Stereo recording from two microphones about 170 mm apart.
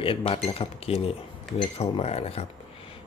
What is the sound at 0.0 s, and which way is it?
Speech, 35° left (ahead or behind).